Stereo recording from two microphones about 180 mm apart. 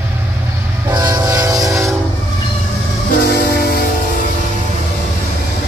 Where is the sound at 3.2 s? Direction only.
60° left (ahead or behind).